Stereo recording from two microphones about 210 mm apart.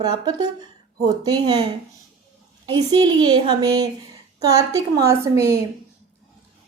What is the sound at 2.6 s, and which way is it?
A woman's voice, 20° right (ahead or behind).